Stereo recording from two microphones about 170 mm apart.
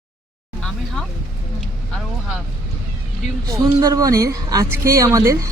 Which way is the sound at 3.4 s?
20° right (ahead or behind).